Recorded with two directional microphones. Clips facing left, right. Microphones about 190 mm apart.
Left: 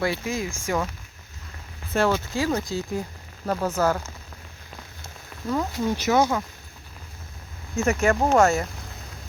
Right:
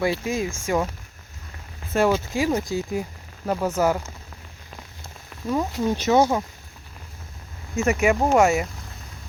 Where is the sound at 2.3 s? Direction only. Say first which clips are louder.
Right 2 dB; 15° right (ahead or behind).